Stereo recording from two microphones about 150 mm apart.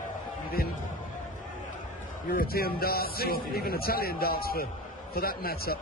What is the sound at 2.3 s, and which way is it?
A man's voice, 85° left.